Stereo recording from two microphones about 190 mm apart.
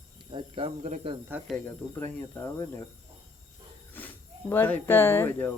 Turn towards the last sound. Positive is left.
turn(degrees=10)  # may be behind; listen again after turning